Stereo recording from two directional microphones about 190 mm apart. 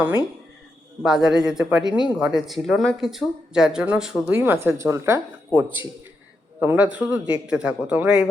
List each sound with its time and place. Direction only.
1.0 s speech: 5° right (ahead or behind)
1.9 s speech: 25° left (ahead or behind)
2.1 s speech: 5° right (ahead or behind)
6.6 s a man's voice: 10° right (ahead or behind)